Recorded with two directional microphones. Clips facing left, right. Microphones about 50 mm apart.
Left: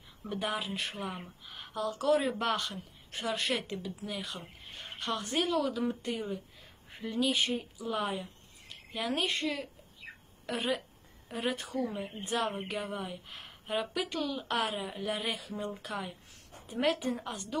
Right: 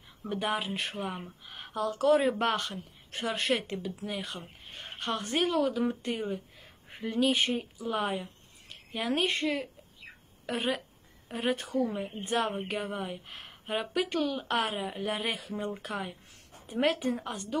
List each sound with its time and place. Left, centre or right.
0.3 s speech: right
1.4 s a sound: right
1.8 s speech: right